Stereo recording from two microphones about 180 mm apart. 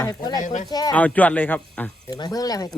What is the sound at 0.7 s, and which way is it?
Speech, 20° left (ahead or behind).